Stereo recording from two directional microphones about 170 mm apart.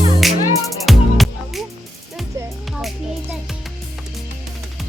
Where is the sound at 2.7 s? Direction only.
5° right (ahead or behind).